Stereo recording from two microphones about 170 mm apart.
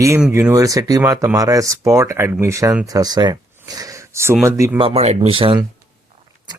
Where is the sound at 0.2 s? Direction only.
10° right (ahead or behind).